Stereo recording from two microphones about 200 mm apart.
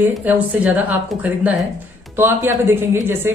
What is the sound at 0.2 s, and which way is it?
Speech, 10° right (ahead or behind).